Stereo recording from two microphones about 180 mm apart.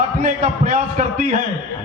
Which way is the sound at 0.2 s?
45° right (ahead or behind).